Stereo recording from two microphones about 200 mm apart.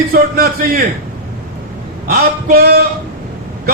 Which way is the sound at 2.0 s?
50° right (ahead or behind).